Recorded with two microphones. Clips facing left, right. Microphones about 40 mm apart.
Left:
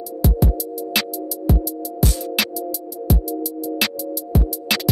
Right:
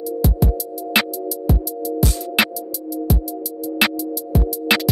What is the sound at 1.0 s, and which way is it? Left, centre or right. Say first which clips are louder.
Music: right 5 dB; centre.